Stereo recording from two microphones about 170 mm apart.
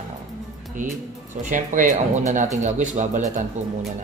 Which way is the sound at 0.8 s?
50° right (ahead or behind).